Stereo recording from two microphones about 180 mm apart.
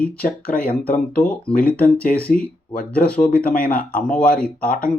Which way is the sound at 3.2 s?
50° left (ahead or behind).